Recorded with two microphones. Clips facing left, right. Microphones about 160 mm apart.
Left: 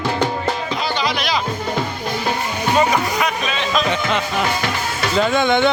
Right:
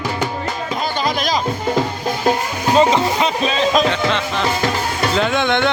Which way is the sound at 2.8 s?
25° right (ahead or behind).